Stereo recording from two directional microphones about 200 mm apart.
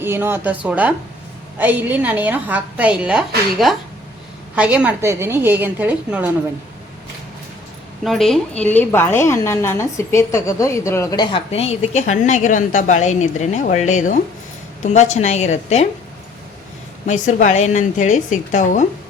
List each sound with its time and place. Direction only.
0.0 s a woman's voice: 10° right (ahead or behind)
8.0 s a woman's voice: centre (ahead or behind); by 15.9 s 35° left (ahead or behind)
17.1 s a woman's voice: 35° left (ahead or behind)